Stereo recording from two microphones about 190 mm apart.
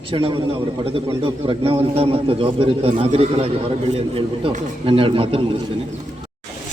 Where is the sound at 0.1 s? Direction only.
30° right (ahead or behind).